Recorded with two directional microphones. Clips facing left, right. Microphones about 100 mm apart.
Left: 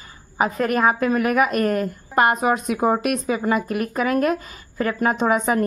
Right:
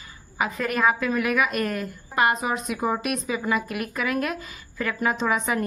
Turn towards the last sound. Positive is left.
turn(degrees=45)  # may be behind; listen again after turning